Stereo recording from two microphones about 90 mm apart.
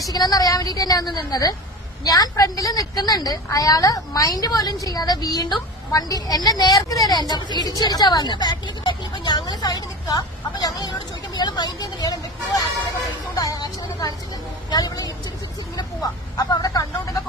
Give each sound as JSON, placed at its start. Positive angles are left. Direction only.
{"t": 0.1, "sound": "a woman's voice", "side_deg": 45}
{"t": 13.3, "sound": "vehicle", "side_deg": 45}
{"t": 14.7, "sound": "a woman's voice", "side_deg": 45}
{"t": 16.5, "sound": "a sound", "side_deg": 45}